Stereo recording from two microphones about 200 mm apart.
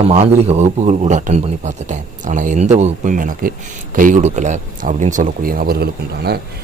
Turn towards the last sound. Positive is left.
turn(degrees=-50)  # may be behind; listen again after turning